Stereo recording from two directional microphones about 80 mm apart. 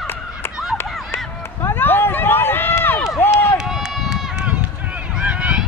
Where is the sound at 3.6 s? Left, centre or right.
Centre.